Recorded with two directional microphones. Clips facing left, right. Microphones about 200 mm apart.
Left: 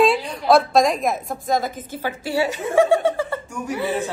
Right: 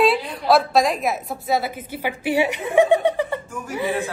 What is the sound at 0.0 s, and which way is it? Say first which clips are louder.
A woman's voice: left 1 dB; centre (ahead or behind).